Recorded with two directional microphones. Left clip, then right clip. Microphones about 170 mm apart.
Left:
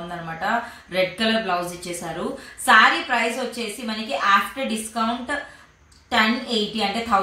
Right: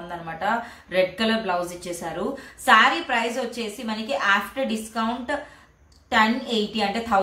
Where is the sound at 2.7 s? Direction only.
15° right (ahead or behind).